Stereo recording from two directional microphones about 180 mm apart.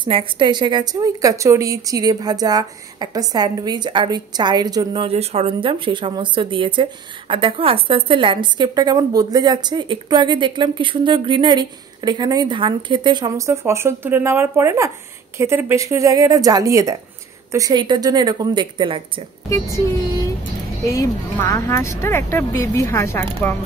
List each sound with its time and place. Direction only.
0.0 s a woman's voice: 25° right (ahead or behind)
20.8 s speech: 20° left (ahead or behind)